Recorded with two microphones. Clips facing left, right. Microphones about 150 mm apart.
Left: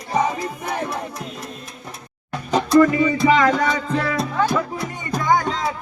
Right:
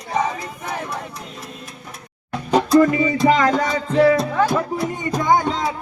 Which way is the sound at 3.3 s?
40° right (ahead or behind).